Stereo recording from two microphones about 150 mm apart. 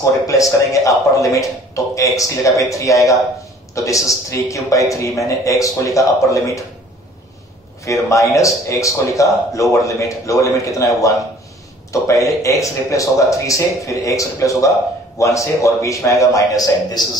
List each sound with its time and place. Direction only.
0.0 s a man's voice: 20° left (ahead or behind)
7.8 s a man's voice: 20° left (ahead or behind)